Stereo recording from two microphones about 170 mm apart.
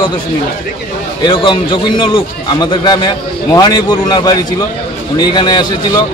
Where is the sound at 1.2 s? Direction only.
30° left (ahead or behind).